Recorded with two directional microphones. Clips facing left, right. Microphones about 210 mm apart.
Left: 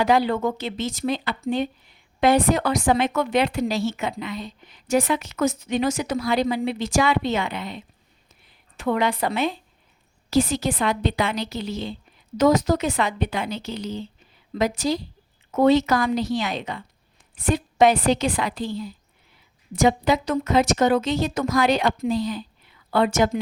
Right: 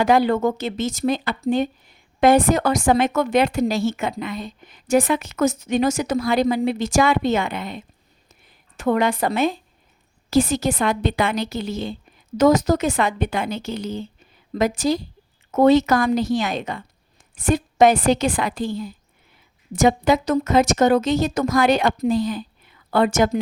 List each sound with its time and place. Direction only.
0.0 s speech: 50° right (ahead or behind)
8.3 s a sound: 45° right (ahead or behind)
10.2 s speech: 45° right (ahead or behind)